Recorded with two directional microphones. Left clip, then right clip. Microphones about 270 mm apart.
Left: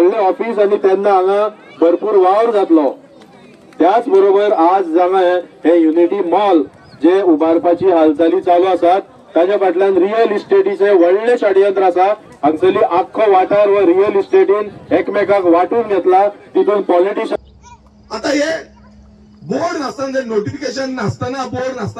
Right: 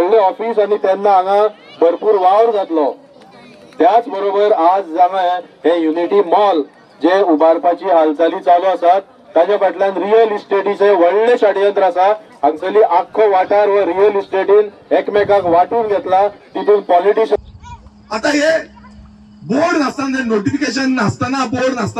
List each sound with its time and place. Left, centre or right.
0.0 s a man's voice: centre
19.5 s speech: right